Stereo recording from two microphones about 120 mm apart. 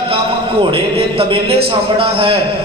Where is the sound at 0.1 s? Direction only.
50° right (ahead or behind).